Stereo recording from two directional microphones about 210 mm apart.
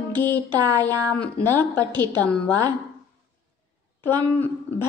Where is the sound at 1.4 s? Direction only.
10° left (ahead or behind).